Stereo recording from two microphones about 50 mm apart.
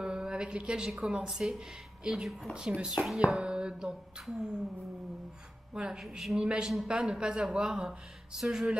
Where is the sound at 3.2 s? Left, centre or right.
Centre.